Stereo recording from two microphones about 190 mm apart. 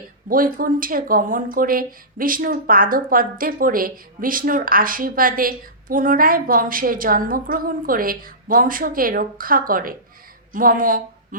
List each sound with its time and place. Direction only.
0.3 s a woman's voice: 50° right (ahead or behind)